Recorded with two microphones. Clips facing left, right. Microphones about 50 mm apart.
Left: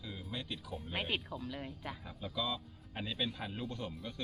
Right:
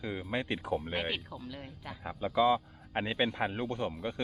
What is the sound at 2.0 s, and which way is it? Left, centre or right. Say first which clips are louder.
Speech: right 13 dB; right.